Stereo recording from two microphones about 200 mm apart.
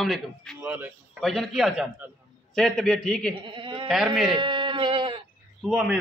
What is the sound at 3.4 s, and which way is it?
Speech, 25° right (ahead or behind).